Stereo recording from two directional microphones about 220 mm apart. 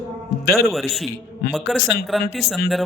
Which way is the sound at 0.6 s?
Centre (ahead or behind).